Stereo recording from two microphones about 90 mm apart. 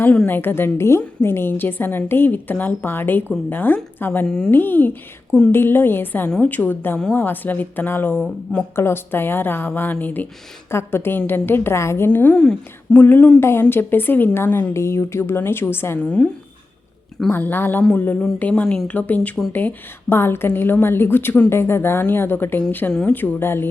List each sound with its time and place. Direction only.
0.3 s a woman's voice: 25° left (ahead or behind)
4.3 s speech: 5° left (ahead or behind)
4.5 s a woman's voice: 20° left (ahead or behind)
16.0 s a woman's voice: 10° left (ahead or behind)